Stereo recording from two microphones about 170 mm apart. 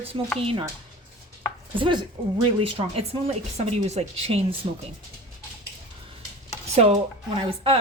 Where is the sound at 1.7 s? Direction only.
30° right (ahead or behind).